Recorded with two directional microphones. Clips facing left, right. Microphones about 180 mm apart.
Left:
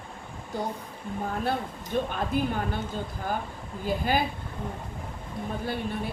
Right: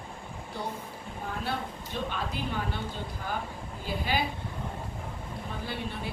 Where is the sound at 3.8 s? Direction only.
50° left (ahead or behind).